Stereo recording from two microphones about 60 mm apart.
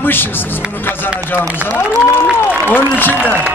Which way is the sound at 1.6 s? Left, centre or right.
Left.